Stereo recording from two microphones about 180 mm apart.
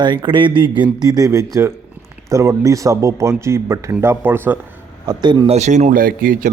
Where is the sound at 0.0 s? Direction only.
25° right (ahead or behind).